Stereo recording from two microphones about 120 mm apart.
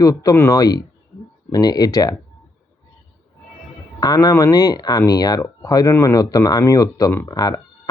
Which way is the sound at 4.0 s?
35° left (ahead or behind).